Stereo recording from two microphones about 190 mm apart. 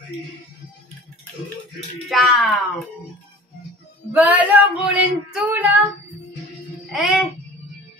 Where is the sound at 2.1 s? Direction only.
Centre (ahead or behind).